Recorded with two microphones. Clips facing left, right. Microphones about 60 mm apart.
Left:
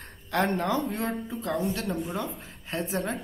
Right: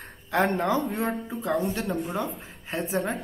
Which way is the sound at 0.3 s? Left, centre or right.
Centre.